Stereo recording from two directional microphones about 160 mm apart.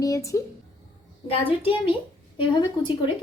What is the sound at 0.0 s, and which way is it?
Speech, 20° left (ahead or behind).